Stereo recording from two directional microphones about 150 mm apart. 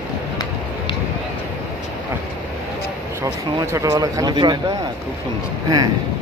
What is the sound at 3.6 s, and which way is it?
Speech, 20° right (ahead or behind).